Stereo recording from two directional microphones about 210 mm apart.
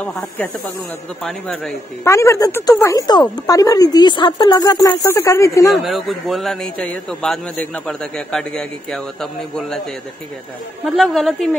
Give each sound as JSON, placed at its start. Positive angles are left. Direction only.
{"t": 0.0, "sound": "a man's voice", "side_deg": 0}
{"t": 2.0, "sound": "a woman's voice", "side_deg": 15}
{"t": 5.7, "sound": "a man's voice", "side_deg": 0}
{"t": 10.9, "sound": "a man's voice", "side_deg": 0}